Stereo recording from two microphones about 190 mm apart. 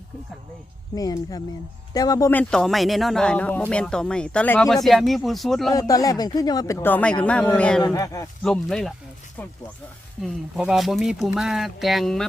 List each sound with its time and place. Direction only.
0.9 s speech: 20° left (ahead or behind); by 5.7 s centre (ahead or behind)
5.7 s speech: 20° left (ahead or behind)
7.9 s speech: 15° left (ahead or behind)
8.4 s speech: centre (ahead or behind)
10.2 s speech: centre (ahead or behind)